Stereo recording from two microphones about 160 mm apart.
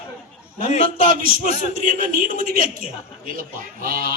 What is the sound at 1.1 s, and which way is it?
Speech, 60° right (ahead or behind).